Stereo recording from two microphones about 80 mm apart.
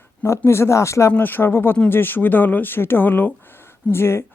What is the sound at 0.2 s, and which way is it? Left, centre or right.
Speech, left.